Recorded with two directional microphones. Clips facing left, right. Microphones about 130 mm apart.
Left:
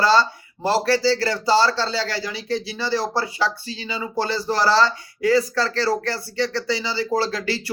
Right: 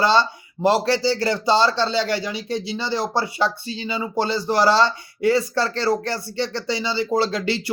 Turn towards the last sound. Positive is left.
turn(degrees=-20)  # may be behind; listen again after turning